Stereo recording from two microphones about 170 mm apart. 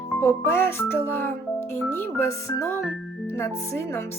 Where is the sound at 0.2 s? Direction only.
15° left (ahead or behind).